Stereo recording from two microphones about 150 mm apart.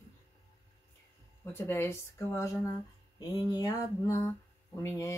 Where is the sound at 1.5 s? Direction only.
15° left (ahead or behind).